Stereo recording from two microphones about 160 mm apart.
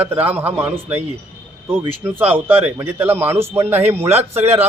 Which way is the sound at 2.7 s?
15° right (ahead or behind).